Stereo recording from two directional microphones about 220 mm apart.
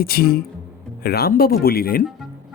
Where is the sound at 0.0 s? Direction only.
45° left (ahead or behind).